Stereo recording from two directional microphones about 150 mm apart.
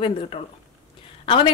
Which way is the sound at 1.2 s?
35° left (ahead or behind).